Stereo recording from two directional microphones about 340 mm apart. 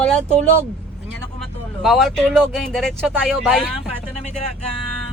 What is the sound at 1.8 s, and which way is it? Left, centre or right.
Speech, centre.